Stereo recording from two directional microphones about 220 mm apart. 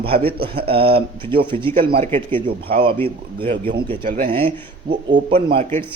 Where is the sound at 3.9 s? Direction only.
35° right (ahead or behind).